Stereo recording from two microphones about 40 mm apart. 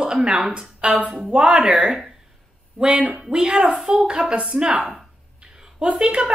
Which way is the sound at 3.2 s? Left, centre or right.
Centre.